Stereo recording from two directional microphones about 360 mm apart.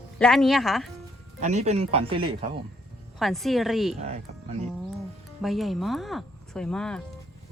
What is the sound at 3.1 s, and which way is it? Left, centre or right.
Speech, centre.